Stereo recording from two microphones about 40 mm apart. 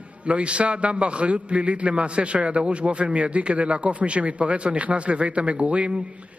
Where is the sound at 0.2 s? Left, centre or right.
Right.